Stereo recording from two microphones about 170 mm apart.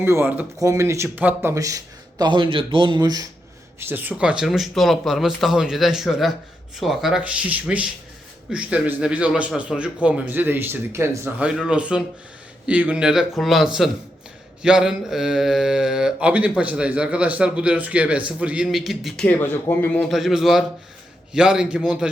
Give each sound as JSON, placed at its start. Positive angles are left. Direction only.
{"t": 0.0, "sound": "speech", "side_deg": -15}
{"t": 3.8, "sound": "a man's voice", "side_deg": -10}